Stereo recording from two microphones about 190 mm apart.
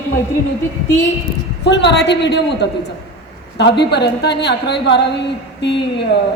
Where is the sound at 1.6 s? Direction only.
65° left (ahead or behind).